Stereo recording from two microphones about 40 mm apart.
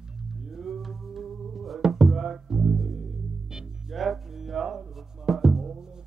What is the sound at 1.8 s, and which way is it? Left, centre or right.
Music, centre.